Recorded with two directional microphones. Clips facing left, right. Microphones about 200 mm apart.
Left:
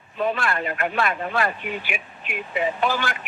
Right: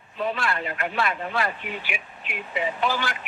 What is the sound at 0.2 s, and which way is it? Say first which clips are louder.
Speech: left 3 dB; 50° left (ahead or behind).